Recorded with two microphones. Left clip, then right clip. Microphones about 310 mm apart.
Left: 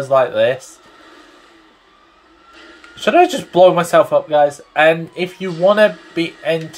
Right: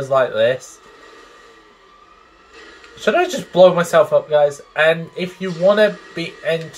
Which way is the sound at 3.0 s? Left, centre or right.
Left.